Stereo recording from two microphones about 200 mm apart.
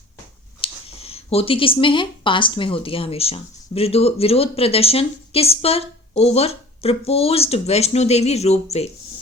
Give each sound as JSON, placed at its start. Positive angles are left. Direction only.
{"t": 0.6, "sound": "speech", "side_deg": 30}